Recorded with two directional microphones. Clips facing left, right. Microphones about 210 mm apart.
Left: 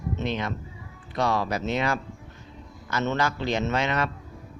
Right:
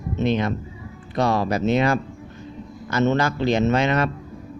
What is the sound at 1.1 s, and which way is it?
Speech, 35° right (ahead or behind).